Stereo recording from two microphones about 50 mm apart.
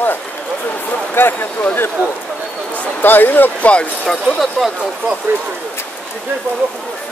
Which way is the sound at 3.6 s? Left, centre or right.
Left.